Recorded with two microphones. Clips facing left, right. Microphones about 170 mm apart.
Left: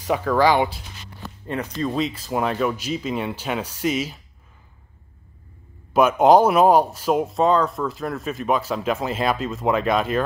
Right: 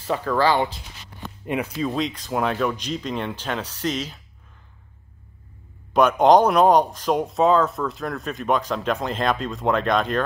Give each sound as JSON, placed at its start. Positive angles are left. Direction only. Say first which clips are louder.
{"t": 0.0, "sound": "speech", "louder": "left 2 dB", "side_deg": 10}
{"t": 1.2, "sound": "speech", "louder": "right 2 dB", "side_deg": -15}
{"t": 5.9, "sound": "speech", "louder": "left 1 dB", "side_deg": 5}